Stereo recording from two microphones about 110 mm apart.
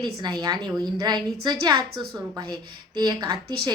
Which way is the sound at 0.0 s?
40° right (ahead or behind).